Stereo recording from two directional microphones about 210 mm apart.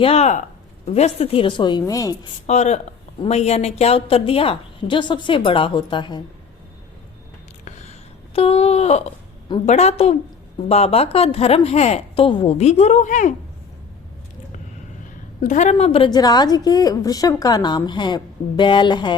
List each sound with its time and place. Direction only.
0.0 s a woman's voice: 30° left (ahead or behind)
2.5 s a woman's voice: 30° left (ahead or behind)
7.6 s a sound: 35° left (ahead or behind)
8.4 s a woman's voice: 30° left (ahead or behind)
15.4 s a woman's voice: 35° left (ahead or behind)